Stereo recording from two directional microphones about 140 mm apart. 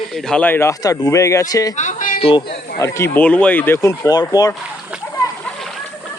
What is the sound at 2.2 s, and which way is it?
Speech, 35° left (ahead or behind).